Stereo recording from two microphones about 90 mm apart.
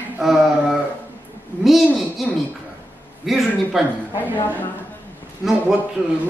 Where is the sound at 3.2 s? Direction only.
Centre (ahead or behind).